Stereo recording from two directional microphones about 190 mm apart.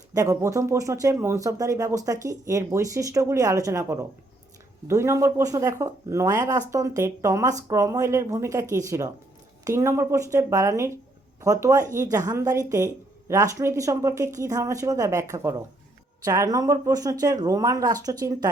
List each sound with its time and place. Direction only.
0.1 s speech: 20° right (ahead or behind)